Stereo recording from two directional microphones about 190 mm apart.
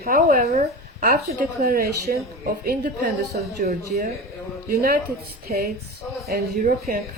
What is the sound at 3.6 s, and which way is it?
Speech, 45° right (ahead or behind).